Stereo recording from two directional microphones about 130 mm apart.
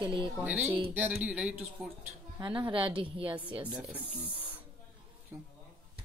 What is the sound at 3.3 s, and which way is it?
Speech, 10° right (ahead or behind).